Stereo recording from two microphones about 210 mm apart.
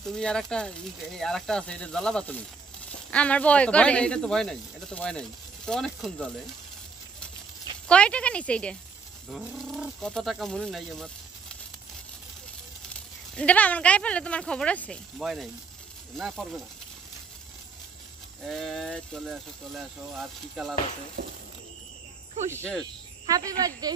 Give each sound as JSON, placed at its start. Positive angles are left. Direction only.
{"t": 0.0, "sound": "speech", "side_deg": 5}
{"t": 7.9, "sound": "speech", "side_deg": 5}
{"t": 13.4, "sound": "speech", "side_deg": 5}
{"t": 18.4, "sound": "speech", "side_deg": 0}
{"t": 21.2, "sound": "speech", "side_deg": -50}
{"t": 22.6, "sound": "speech", "side_deg": 5}
{"t": 23.2, "sound": "speech", "side_deg": -15}